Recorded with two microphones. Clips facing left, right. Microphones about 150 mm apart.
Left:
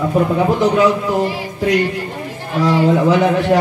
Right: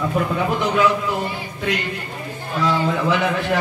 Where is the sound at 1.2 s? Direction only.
80° left.